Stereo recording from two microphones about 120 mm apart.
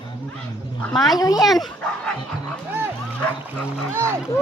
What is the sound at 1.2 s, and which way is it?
Speech, 30° left (ahead or behind).